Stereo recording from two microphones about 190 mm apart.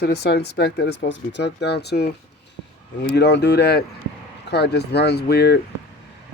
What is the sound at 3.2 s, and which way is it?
Speech, 65° left (ahead or behind).